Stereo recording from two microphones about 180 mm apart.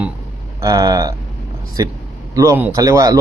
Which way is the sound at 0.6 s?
20° right (ahead or behind).